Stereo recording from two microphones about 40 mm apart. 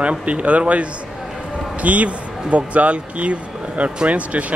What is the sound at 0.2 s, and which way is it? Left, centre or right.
Speech, right.